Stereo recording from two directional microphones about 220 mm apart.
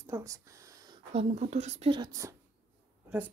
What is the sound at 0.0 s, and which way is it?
Speech, 15° right (ahead or behind).